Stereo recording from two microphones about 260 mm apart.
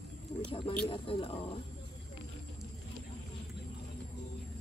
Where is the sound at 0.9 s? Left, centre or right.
Left.